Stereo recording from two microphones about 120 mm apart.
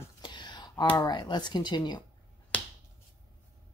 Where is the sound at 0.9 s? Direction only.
35° left (ahead or behind).